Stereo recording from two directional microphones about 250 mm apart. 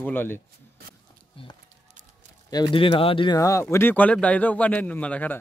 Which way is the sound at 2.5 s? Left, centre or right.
Centre.